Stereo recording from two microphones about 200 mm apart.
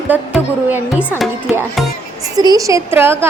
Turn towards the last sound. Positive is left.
turn(degrees=-10)  # may be behind; listen again after turning